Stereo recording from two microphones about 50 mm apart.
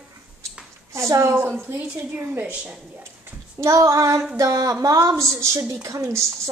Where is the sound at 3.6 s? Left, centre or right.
Right.